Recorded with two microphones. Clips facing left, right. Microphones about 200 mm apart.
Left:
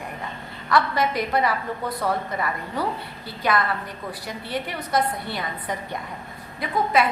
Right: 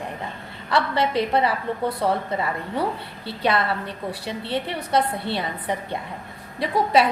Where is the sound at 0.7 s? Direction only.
30° right (ahead or behind).